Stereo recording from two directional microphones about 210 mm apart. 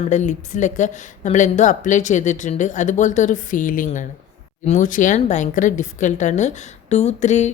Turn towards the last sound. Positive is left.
turn(degrees=35)  # may be behind; listen again after turning